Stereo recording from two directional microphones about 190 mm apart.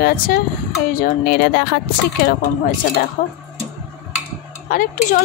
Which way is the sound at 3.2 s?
45° left (ahead or behind).